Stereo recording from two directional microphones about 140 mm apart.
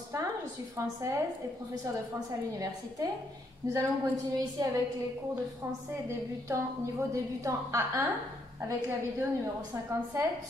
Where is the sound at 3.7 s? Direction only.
25° right (ahead or behind).